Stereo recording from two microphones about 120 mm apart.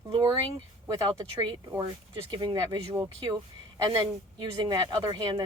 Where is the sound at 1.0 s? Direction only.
40° right (ahead or behind).